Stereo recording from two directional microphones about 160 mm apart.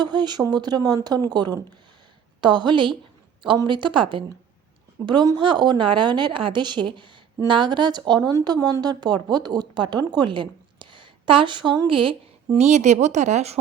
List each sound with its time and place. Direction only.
0.0 s a woman's voice: 25° right (ahead or behind); by 13.6 s 45° right (ahead or behind)